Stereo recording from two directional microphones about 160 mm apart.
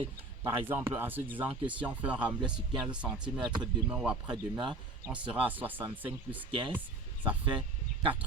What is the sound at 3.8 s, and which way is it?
Speech, 5° right (ahead or behind).